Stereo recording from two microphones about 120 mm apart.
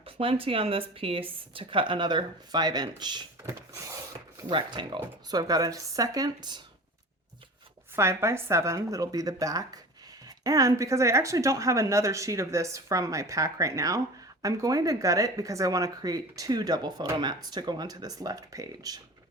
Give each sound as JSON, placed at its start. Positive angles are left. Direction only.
{"t": 0.0, "sound": "a woman's voice", "side_deg": -50}
{"t": 3.4, "sound": "a sound", "side_deg": -25}
{"t": 4.4, "sound": "speech", "side_deg": -40}
{"t": 7.9, "sound": "speech", "side_deg": -20}